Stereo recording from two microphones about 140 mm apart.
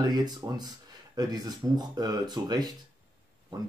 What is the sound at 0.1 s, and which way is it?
Speech, 30° right (ahead or behind).